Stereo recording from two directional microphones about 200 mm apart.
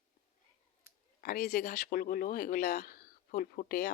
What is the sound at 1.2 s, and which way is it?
Speech, 50° left (ahead or behind).